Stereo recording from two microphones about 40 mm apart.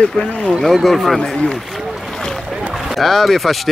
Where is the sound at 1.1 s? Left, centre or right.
Centre.